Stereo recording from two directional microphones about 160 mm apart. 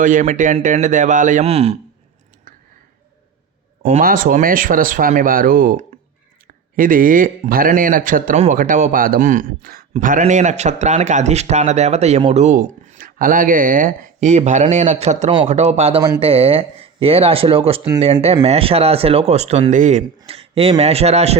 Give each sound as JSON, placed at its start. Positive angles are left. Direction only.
{"t": 0.0, "sound": "speech", "side_deg": -55}
{"t": 4.0, "sound": "speech", "side_deg": -60}
{"t": 16.0, "sound": "speech", "side_deg": -20}
{"t": 16.2, "sound": "speech", "side_deg": -35}